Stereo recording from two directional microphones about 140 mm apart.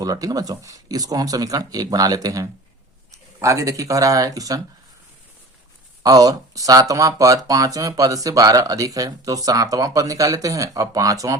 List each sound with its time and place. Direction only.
0.0 s speech: 25° right (ahead or behind)
6.0 s speech: 25° right (ahead or behind)